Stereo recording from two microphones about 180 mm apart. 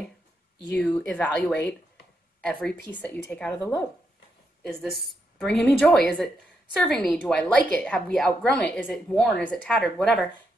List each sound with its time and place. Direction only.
0.7 s a woman's voice: 5° left (ahead or behind)
3.5 s speech: 15° left (ahead or behind)
5.4 s a woman's voice: 5° left (ahead or behind)